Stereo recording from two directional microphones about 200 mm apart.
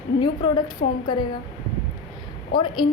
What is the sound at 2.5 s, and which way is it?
Speech, 25° left (ahead or behind).